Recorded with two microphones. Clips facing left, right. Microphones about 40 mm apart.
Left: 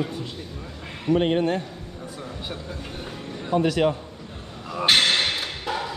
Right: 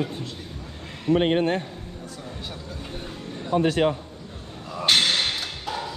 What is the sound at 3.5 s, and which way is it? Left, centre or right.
Speech, right.